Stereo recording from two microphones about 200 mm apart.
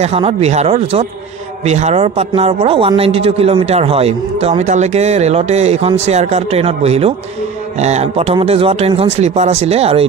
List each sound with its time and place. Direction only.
0.0 s speech: 30° right (ahead or behind)